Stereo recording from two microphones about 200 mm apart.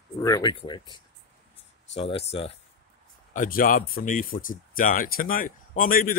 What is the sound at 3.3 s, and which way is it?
Speech, 45° left (ahead or behind).